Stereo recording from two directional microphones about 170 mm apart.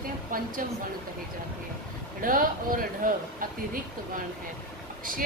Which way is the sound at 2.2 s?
55° right (ahead or behind).